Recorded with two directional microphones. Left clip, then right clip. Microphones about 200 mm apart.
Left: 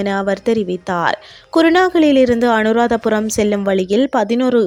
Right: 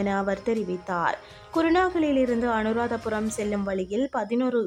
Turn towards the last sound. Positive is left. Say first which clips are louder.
# left 11 dB
turn(degrees=35)  # may be behind; listen again after turning